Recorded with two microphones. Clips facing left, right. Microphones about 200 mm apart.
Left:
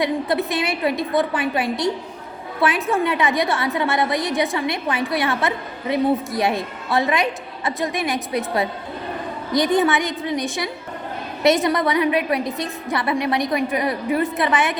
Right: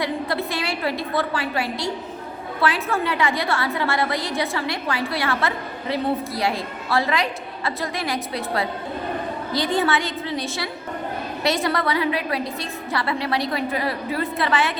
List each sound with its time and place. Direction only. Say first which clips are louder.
0.0 s a woman's voice: left 4 dB; 20° left (ahead or behind)